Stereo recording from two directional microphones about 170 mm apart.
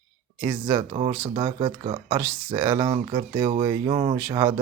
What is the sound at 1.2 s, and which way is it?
Speech, 30° right (ahead or behind).